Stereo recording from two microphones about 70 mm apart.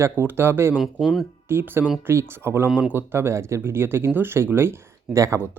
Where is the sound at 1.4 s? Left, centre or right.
Right.